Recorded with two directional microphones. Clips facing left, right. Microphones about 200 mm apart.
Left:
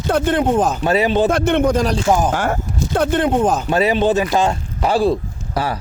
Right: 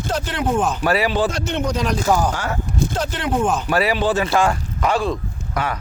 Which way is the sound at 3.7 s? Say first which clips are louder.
Left 3 dB; 20° left (ahead or behind).